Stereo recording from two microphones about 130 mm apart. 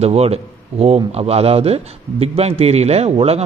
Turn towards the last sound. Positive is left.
turn(degrees=-50)  # may be behind; listen again after turning